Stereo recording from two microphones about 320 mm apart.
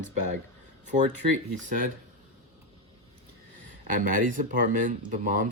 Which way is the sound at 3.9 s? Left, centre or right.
Right.